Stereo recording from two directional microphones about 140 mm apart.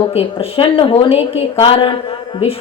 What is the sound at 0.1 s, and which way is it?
A woman's voice, 45° left (ahead or behind).